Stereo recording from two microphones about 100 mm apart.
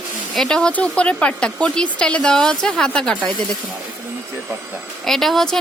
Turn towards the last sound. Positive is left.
turn(degrees=5)  # may be behind; listen again after turning